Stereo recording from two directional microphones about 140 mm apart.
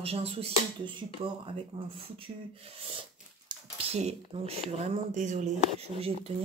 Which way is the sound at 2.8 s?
40° right (ahead or behind).